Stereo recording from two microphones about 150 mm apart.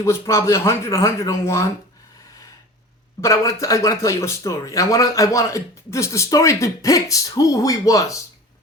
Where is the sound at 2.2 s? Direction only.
20° left (ahead or behind).